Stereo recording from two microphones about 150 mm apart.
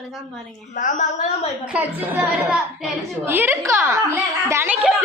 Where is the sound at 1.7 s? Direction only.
10° right (ahead or behind).